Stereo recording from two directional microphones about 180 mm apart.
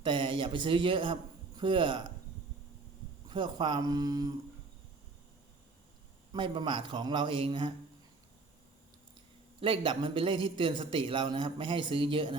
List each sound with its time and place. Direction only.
0.0 s a man's voice: 25° right (ahead or behind)
3.2 s a man's voice: 25° right (ahead or behind)
6.3 s a man's voice: 25° right (ahead or behind)
9.6 s a man's voice: 30° right (ahead or behind)